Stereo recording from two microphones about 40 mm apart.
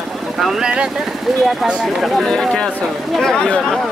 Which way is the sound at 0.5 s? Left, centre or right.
Centre.